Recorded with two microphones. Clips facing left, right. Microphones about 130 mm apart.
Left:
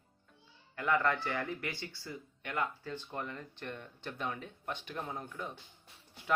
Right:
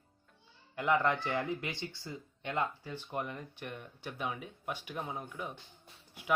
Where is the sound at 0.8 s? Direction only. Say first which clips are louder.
Right 1 dB; 20° right (ahead or behind).